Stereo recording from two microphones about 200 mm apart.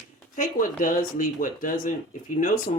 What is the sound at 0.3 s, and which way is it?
Speech, 40° left (ahead or behind).